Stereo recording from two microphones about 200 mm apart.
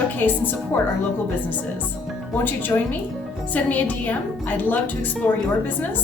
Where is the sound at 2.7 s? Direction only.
15° left (ahead or behind).